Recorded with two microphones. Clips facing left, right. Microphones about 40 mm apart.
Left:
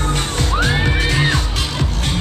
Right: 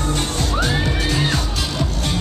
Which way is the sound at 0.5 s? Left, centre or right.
Left.